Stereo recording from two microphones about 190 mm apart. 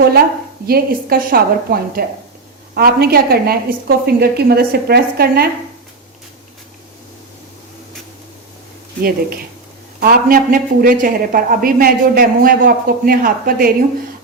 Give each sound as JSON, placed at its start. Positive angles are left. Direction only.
{"t": 0.7, "sound": "a man's voice", "side_deg": -50}
{"t": 9.0, "sound": "a man's voice", "side_deg": -50}